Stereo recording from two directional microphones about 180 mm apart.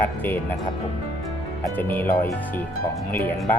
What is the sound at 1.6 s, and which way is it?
Speech, 10° left (ahead or behind).